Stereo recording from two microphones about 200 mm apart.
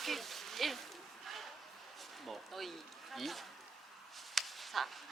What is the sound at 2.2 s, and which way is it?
Speech, centre (ahead or behind).